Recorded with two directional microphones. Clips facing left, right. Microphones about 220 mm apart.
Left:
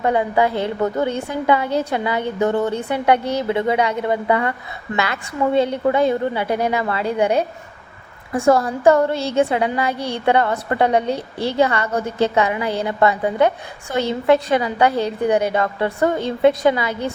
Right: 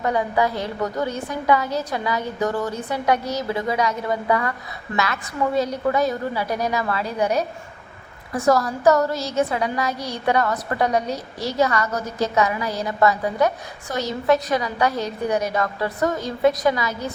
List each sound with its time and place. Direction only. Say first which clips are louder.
0.0 s a woman's voice: left 3 dB; 25° left (ahead or behind)